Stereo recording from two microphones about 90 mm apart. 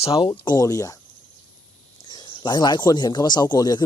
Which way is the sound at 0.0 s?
90° left.